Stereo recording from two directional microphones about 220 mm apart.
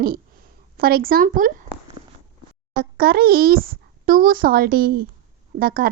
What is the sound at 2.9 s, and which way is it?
Speech, 45° right (ahead or behind).